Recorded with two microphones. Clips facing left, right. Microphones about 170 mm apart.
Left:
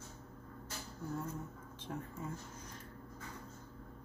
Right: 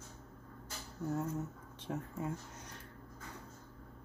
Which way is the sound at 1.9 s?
75° right (ahead or behind).